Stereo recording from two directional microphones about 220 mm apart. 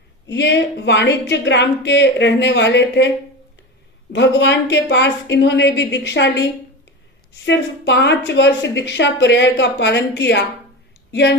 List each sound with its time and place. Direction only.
0.3 s a woman's voice: 50° left (ahead or behind)
4.1 s a woman's voice: 55° left (ahead or behind)
7.4 s a woman's voice: 50° left (ahead or behind)